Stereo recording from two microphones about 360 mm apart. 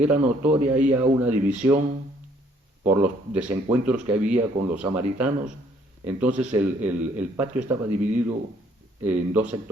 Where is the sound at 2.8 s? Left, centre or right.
Centre.